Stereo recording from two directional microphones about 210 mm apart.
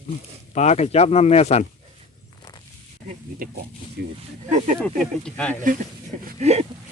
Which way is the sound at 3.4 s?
45° right (ahead or behind).